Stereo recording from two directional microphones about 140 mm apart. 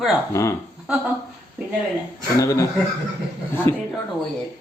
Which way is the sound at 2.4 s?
25° left (ahead or behind).